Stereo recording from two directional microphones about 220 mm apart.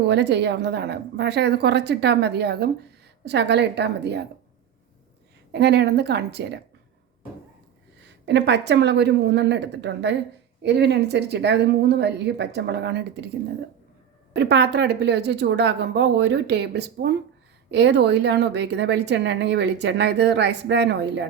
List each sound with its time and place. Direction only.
0.1 s a woman's voice: 50° right (ahead or behind)
5.5 s a woman's voice: 50° right (ahead or behind)
8.0 s a woman's voice: 50° right (ahead or behind)
14.3 s a woman's voice: 50° right (ahead or behind)